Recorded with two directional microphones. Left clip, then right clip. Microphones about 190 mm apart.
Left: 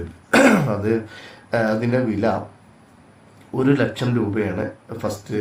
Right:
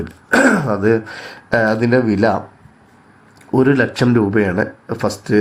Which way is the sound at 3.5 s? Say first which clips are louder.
Right 6 dB; 30° right (ahead or behind).